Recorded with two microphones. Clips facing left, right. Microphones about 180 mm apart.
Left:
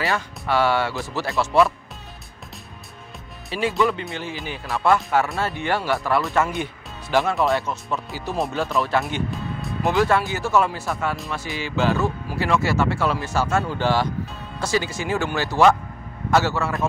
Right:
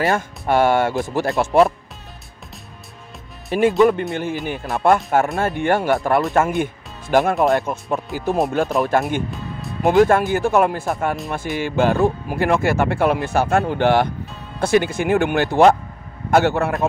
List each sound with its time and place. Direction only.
0.0 s speech: 50° right (ahead or behind)
3.5 s speech: 50° right (ahead or behind)
9.3 s music: centre (ahead or behind)
9.8 s speech: 50° right (ahead or behind)